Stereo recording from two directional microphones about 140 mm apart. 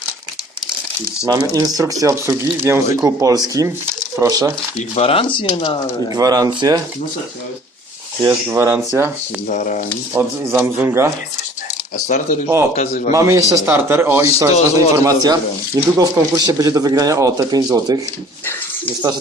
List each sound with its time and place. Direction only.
1.5 s speech: 25° right (ahead or behind)
4.9 s speech: 45° left (ahead or behind)
6.1 s speech: 25° right (ahead or behind)
8.2 s speech: 20° right (ahead or behind)
9.5 s speech: 65° left (ahead or behind)
10.2 s speech: 15° right (ahead or behind)
12.0 s speech: 60° left (ahead or behind)
13.1 s speech: 20° right (ahead or behind)